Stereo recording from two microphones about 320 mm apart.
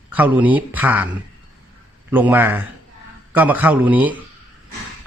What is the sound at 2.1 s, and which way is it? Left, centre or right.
A man's voice, centre.